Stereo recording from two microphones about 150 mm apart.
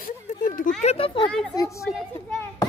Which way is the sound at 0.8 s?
45° left (ahead or behind).